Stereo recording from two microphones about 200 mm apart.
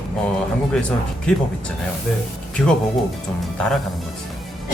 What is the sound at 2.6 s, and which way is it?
Speech, 5° left (ahead or behind).